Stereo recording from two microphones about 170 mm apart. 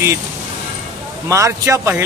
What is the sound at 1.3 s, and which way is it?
Speech, 15° right (ahead or behind).